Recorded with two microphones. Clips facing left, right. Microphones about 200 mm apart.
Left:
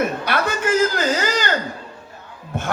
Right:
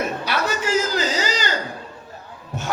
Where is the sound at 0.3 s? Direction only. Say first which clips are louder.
Left 2 dB; 55° left (ahead or behind).